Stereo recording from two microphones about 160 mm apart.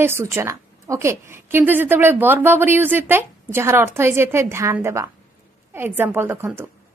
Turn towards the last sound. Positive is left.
turn(degrees=-15)  # may be behind; listen again after turning